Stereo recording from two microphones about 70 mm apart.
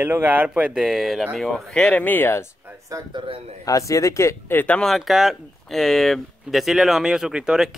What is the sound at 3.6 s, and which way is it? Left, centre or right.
Speech, left.